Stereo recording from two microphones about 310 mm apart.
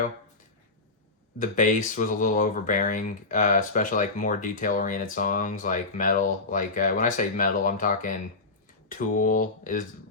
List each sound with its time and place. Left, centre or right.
1.4 s speech: left